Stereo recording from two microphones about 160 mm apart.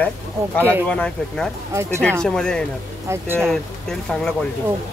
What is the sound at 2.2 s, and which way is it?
Speech, 5° left (ahead or behind).